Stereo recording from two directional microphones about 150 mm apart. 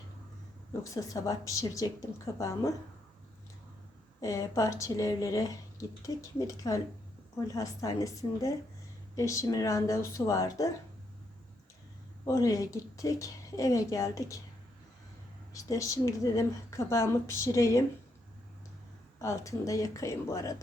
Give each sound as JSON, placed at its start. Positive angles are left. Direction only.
{"t": 0.9, "sound": "speech", "side_deg": 25}
{"t": 4.2, "sound": "speech", "side_deg": 20}
{"t": 12.2, "sound": "speech", "side_deg": 20}
{"t": 15.5, "sound": "speech", "side_deg": 20}
{"t": 19.2, "sound": "speech", "side_deg": 20}